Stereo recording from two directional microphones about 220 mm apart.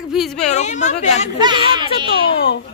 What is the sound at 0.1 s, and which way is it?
Speech, centre (ahead or behind).